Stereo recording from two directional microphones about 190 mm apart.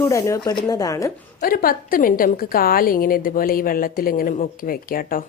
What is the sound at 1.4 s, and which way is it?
A woman's voice, 50° left (ahead or behind).